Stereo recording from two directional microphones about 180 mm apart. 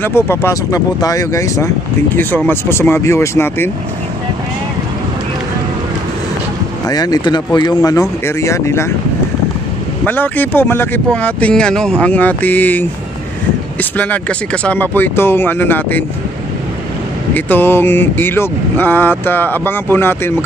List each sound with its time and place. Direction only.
0.0 s speech: 15° left (ahead or behind)
6.9 s speech: 20° left (ahead or behind)
10.0 s speech: 10° left (ahead or behind)
13.9 s speech: 10° left (ahead or behind)
17.3 s speech: 10° left (ahead or behind)